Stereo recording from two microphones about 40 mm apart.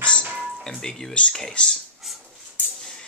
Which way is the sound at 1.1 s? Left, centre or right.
Left.